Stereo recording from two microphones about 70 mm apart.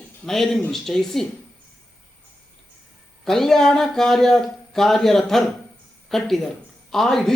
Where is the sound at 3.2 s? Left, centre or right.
Centre.